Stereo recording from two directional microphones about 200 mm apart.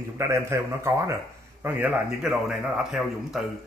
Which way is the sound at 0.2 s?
15° right (ahead or behind).